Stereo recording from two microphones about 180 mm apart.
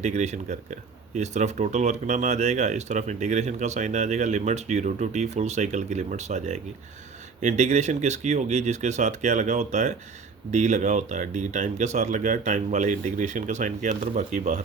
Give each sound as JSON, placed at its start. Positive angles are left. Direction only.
{"t": 0.0, "sound": "speech", "side_deg": -40}